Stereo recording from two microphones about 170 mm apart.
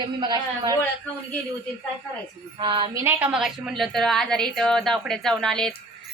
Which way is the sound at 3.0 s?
10° right (ahead or behind).